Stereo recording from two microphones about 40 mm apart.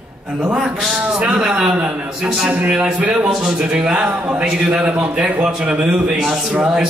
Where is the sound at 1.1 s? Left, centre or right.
Centre.